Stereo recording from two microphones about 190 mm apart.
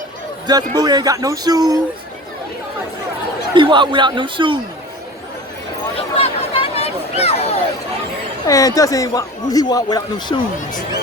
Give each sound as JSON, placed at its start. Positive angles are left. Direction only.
{"t": 0.4, "sound": "a man's voice", "side_deg": -20}
{"t": 3.5, "sound": "a man's voice", "side_deg": -25}
{"t": 6.1, "sound": "a sound", "side_deg": 30}
{"t": 8.4, "sound": "a man's voice", "side_deg": 20}